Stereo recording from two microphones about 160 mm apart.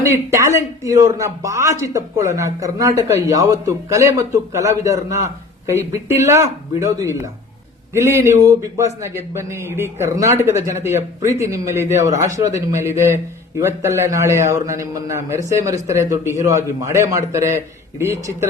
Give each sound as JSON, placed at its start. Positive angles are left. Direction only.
{"t": 0.0, "sound": "a man's voice", "side_deg": -15}